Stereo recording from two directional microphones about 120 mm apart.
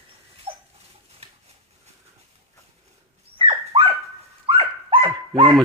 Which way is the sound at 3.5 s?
50° right (ahead or behind).